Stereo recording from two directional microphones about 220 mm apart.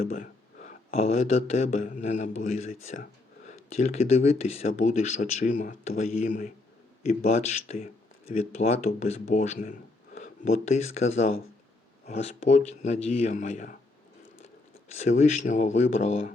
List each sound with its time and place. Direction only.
0.0 s speech: 35° left (ahead or behind)
14.9 s speech: 30° left (ahead or behind)